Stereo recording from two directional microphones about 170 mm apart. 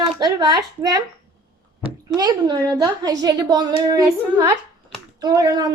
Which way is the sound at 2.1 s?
25° right (ahead or behind).